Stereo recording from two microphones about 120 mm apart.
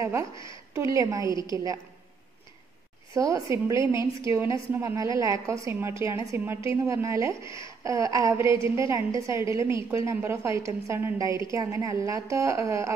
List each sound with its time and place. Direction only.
0.0 s a woman's voice: 25° right (ahead or behind)
3.2 s a woman's voice: 25° right (ahead or behind)